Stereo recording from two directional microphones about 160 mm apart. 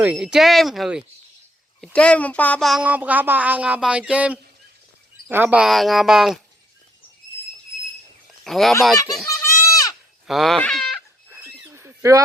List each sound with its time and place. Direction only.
0.0 s speech: 5° right (ahead or behind)
1.8 s speech: 5° left (ahead or behind)
8.4 s speech: centre (ahead or behind)
9.3 s goat: 15° left (ahead or behind)
10.2 s speech: centre (ahead or behind)
11.3 s a sound: 15° right (ahead or behind)